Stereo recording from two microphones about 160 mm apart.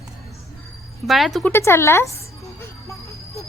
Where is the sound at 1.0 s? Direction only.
Centre (ahead or behind).